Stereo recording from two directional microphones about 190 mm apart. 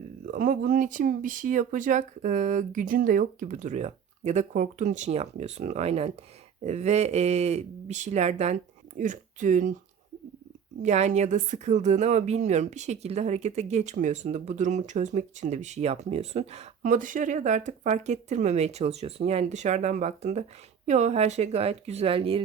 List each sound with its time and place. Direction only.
0.3 s speech: 45° right (ahead or behind)
10.8 s speech: 35° right (ahead or behind)